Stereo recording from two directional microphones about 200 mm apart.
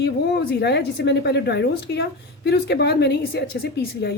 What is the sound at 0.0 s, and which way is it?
A woman's voice, 55° left (ahead or behind).